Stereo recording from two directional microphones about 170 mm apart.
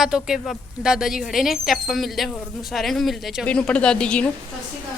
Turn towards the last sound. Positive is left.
turn(degrees=5)  # may be behind; listen again after turning